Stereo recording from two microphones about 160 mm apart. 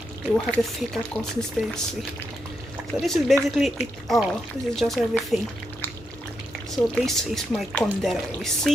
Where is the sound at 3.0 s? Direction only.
Centre (ahead or behind).